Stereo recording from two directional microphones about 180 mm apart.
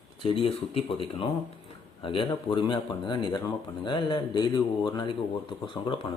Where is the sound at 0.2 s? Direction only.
30° left (ahead or behind).